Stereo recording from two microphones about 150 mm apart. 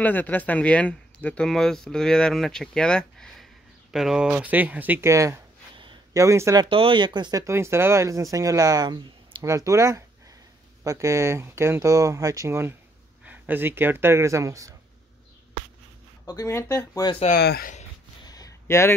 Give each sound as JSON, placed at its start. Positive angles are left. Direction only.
{"t": 0.0, "sound": "speech", "side_deg": 10}
{"t": 6.7, "sound": "speech", "side_deg": -35}
{"t": 16.3, "sound": "speech", "side_deg": 20}
{"t": 17.3, "sound": "speech", "side_deg": 85}
{"t": 18.2, "sound": "a sound", "side_deg": 25}